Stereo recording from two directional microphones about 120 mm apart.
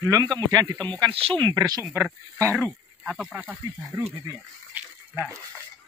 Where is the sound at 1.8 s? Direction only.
15° right (ahead or behind).